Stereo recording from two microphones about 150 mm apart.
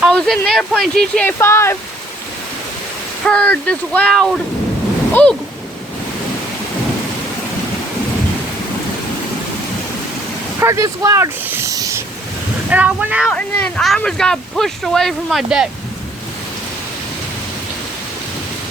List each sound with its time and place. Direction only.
0.1 s speech: 5° left (ahead or behind)
3.2 s speech: 10° left (ahead or behind)
10.6 s speech: 20° right (ahead or behind)
12.7 s speech: 10° right (ahead or behind)
13.2 s speech: centre (ahead or behind)